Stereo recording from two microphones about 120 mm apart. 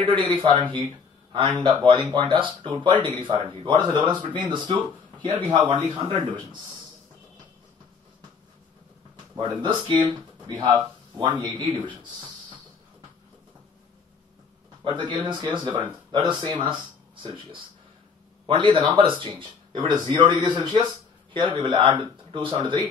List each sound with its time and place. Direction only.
0.3 s speech: 45° right (ahead or behind)
5.8 s speech: 15° left (ahead or behind)
9.4 s speech: 45° right (ahead or behind)
14.8 s speech: 40° right (ahead or behind)